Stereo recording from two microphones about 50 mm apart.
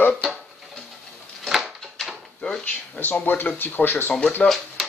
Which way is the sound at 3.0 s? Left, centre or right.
Left.